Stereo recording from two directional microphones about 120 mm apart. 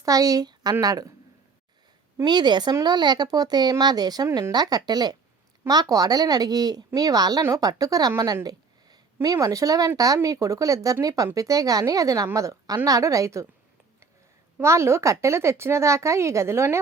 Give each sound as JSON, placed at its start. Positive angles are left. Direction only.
{"t": 0.0, "sound": "a woman's voice", "side_deg": -30}
{"t": 2.2, "sound": "a woman's voice", "side_deg": -40}
{"t": 14.6, "sound": "speech", "side_deg": -25}